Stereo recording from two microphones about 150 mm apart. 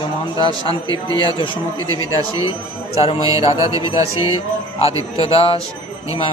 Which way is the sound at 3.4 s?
20° right (ahead or behind).